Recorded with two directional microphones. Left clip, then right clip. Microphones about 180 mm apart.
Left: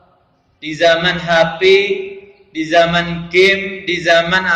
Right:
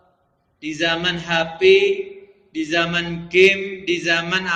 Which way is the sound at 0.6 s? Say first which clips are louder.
Left 9 dB; 25° right (ahead or behind).